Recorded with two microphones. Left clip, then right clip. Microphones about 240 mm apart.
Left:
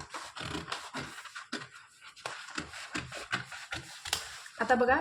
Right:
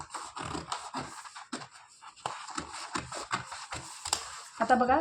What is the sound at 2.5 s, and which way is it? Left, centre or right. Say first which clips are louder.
Shuffle: right 2 dB; centre.